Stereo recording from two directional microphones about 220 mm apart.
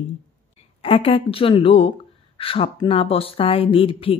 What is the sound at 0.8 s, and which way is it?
Speech, 25° left (ahead or behind).